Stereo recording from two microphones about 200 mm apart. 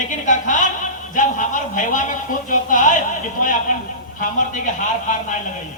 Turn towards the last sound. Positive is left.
turn(degrees=40)  # may be behind; listen again after turning